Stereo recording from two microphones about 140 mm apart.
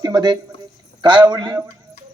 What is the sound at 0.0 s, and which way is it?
A man's voice, 30° right (ahead or behind).